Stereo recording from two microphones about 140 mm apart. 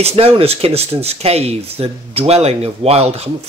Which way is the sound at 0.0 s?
45° right (ahead or behind).